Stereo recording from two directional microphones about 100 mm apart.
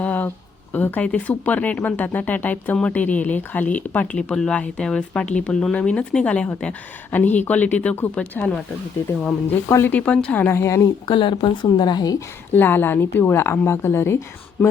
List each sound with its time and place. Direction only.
0.0 s a sound: 15° left (ahead or behind)
0.7 s speech: 15° left (ahead or behind)
9.6 s a woman's voice: 25° left (ahead or behind)
9.9 s speech: 15° left (ahead or behind)
10.6 s a woman's voice: 30° left (ahead or behind)
11.0 s speech: 55° left (ahead or behind)
12.5 s a woman's voice: 20° left (ahead or behind)